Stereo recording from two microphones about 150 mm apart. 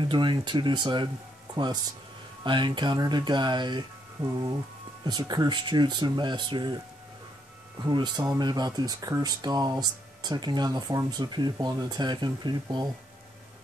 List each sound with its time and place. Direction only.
0.0 s speech: 30° right (ahead or behind)
5.0 s speech: 30° right (ahead or behind)
7.8 s speech: 30° right (ahead or behind)